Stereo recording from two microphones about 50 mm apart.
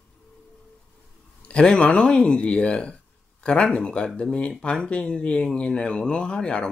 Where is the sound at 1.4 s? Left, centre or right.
Centre.